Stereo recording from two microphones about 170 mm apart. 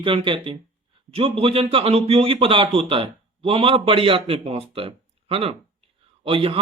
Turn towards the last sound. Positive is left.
turn(degrees=-30)  # may be behind; listen again after turning